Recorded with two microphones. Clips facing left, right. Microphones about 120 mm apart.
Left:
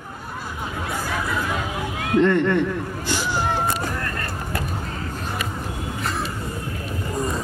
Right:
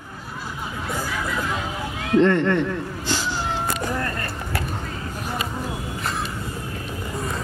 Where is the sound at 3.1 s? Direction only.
15° left (ahead or behind).